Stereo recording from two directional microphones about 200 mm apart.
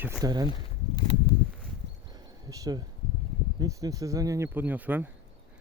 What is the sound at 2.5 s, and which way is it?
Speech, 20° right (ahead or behind).